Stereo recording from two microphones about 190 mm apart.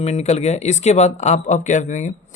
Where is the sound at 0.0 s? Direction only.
35° left (ahead or behind).